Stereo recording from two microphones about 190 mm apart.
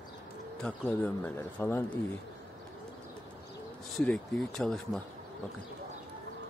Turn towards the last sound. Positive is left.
turn(degrees=0)  # may be behind; listen again after turning